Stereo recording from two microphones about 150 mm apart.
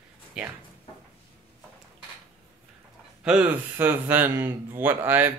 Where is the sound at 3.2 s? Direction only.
10° right (ahead or behind).